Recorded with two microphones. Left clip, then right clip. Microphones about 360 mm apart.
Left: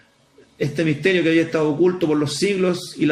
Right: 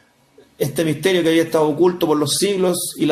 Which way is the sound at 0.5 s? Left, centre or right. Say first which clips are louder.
Right 2 dB; right.